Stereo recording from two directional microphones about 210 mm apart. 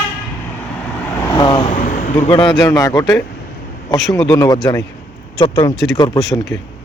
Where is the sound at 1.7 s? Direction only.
40° left (ahead or behind).